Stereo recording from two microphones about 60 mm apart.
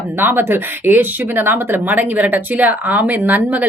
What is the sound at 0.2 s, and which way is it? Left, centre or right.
Speech, right.